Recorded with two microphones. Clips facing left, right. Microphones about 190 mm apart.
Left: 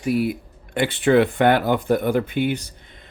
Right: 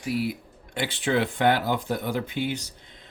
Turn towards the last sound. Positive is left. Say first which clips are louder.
# left 5 dB
turn(degrees=55)  # may be behind; listen again after turning